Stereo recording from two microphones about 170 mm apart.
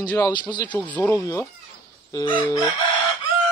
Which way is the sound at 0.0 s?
10° left (ahead or behind).